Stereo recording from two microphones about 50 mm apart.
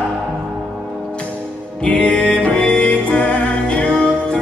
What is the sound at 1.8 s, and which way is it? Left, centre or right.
Music, left.